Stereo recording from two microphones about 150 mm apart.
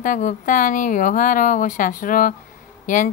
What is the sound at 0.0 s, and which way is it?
A woman's voice, 60° left (ahead or behind).